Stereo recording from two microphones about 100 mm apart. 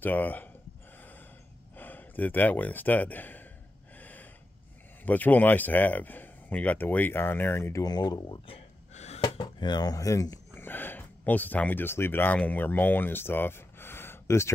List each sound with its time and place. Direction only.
0.0 s speech: 15° left (ahead or behind)
1.8 s speech: 20° left (ahead or behind)
3.9 s gasp: 15° left (ahead or behind)
5.0 s speech: 15° left (ahead or behind)
7.8 s speech: 40° left (ahead or behind)
8.5 s gasp: 80° left
9.2 s speech: 50° left (ahead or behind); by 10.4 s 35° left (ahead or behind)
10.5 s speech: 20° left (ahead or behind)